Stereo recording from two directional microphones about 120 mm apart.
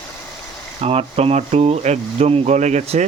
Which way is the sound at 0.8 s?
55° right (ahead or behind).